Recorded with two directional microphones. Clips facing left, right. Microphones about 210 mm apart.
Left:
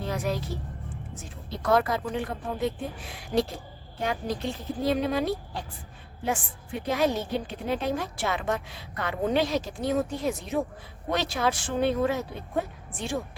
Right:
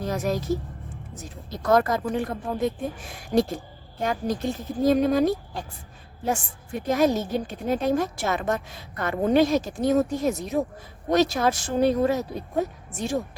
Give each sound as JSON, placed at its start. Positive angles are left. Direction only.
{"t": 0.0, "sound": "a woman's voice", "side_deg": -45}